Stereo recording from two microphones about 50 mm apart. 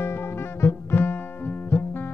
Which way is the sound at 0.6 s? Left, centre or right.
Left.